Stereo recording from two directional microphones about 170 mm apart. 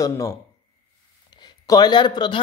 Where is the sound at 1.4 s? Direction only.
25° left (ahead or behind).